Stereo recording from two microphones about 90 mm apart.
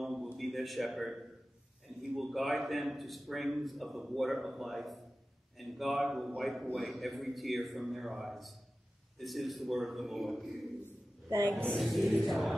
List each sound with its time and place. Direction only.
0.0 s a sound: centre (ahead or behind)
2.1 s a man's voice: centre (ahead or behind)
11.8 s a man's voice: centre (ahead or behind)